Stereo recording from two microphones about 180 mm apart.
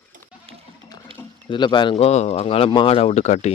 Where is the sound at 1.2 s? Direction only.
25° left (ahead or behind).